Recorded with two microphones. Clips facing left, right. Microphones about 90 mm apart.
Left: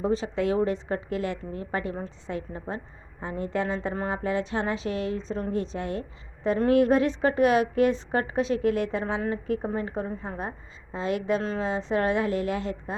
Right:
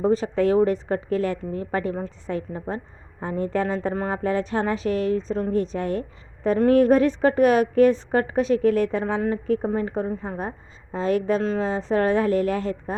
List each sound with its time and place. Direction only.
0.0 s a woman's voice: 45° right (ahead or behind)
8.4 s a woman's voice: 25° left (ahead or behind)
8.7 s a woman's voice: 40° right (ahead or behind)